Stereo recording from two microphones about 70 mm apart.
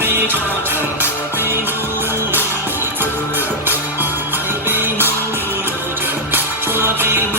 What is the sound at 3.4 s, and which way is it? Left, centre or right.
Music, right.